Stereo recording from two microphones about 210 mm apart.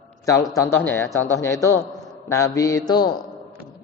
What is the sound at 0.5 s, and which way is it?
Speech, 15° left (ahead or behind).